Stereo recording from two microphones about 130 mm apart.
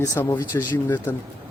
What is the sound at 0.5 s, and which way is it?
Speech, 15° left (ahead or behind).